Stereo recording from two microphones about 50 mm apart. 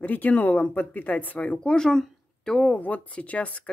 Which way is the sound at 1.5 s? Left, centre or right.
Centre.